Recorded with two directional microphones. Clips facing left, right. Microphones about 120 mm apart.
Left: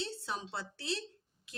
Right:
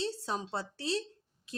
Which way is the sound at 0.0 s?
35° right (ahead or behind).